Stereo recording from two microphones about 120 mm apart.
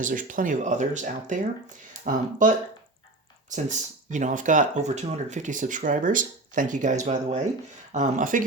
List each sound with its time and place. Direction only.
0.0 s speech: 90° right
3.5 s speech: 90° right